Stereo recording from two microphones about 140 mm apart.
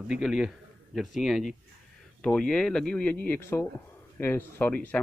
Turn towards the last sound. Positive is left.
turn(degrees=10)  # may be behind; listen again after turning